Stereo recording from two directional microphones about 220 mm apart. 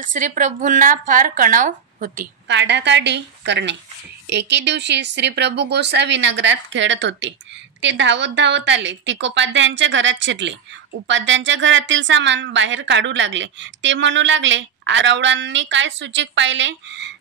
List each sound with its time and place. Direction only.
0.0 s speech: 35° right (ahead or behind)
2.4 s a woman's voice: 55° right (ahead or behind)